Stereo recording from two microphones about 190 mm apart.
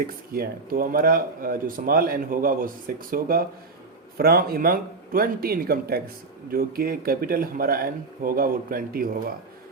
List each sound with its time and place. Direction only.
0.0 s speech: 50° right (ahead or behind)